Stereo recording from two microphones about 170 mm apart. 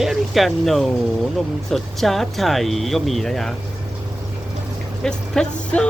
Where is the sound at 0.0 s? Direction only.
Centre (ahead or behind).